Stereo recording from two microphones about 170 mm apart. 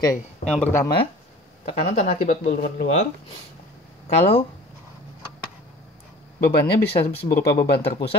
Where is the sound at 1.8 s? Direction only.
40° left (ahead or behind); by 2.8 s 65° left (ahead or behind).